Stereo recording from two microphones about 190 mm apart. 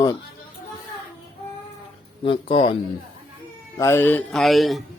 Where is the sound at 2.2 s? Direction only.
25° left (ahead or behind).